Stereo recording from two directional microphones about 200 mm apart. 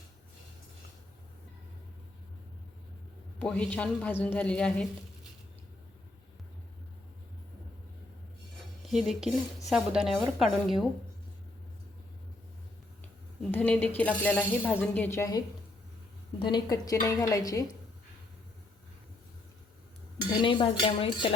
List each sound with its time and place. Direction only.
3.3 s speech: 5° left (ahead or behind)
8.9 s a woman's voice: centre (ahead or behind)
13.5 s speech: 10° left (ahead or behind)
16.5 s speech: 20° left (ahead or behind)
20.4 s speech: 25° left (ahead or behind)